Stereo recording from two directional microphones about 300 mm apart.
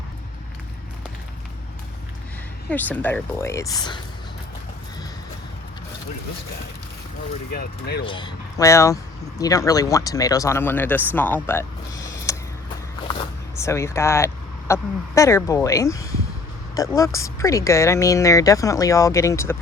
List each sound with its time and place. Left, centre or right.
2.6 s speech: centre
7.5 s speech: left
8.0 s speech: centre
12.0 s a sound: centre
13.6 s speech: centre